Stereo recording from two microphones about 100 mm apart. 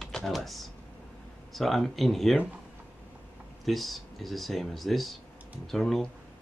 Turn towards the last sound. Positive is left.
turn(degrees=5)  # may be behind; listen again after turning